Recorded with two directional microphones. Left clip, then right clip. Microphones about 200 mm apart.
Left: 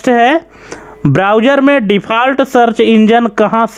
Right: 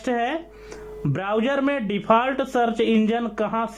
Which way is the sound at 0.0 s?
45° left (ahead or behind).